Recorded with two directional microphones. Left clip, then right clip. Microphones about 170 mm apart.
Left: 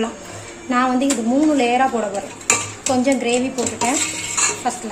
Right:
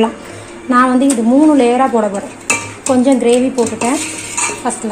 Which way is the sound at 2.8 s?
25° right (ahead or behind).